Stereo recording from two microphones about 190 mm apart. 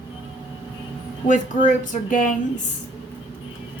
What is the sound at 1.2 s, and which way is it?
Speech, 40° left (ahead or behind).